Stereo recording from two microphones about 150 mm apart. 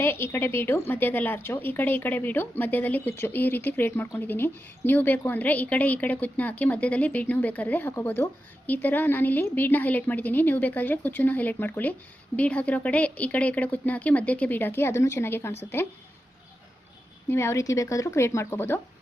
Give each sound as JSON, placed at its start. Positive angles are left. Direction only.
{"t": 0.0, "sound": "speech", "side_deg": 15}
{"t": 17.2, "sound": "speech", "side_deg": 20}